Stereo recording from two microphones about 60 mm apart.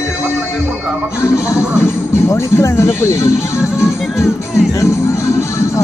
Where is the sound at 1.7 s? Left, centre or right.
Left.